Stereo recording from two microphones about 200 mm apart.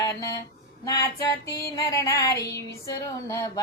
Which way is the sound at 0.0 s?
15° left (ahead or behind).